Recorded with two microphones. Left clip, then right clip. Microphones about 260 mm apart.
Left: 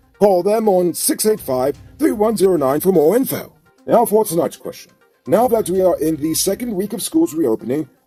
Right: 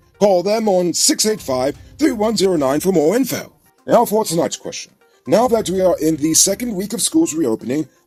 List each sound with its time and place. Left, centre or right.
0.2 s speech: right